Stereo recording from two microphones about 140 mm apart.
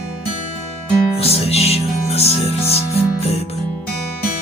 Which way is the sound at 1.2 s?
45° left (ahead or behind).